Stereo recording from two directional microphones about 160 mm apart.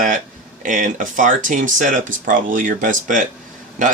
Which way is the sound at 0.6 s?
55° right (ahead or behind).